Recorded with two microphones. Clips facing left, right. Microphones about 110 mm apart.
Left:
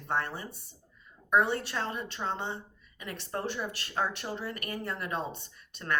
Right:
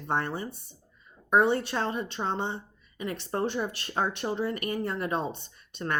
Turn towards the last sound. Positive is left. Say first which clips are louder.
# right 2 dB
turn(degrees=-25)  # may be behind; listen again after turning